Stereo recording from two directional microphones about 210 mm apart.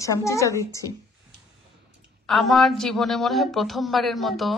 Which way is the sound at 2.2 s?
Centre (ahead or behind).